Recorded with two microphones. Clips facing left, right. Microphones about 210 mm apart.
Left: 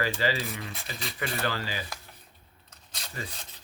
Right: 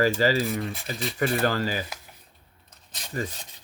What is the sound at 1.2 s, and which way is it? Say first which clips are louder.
Speech: right 8 dB; 45° right (ahead or behind).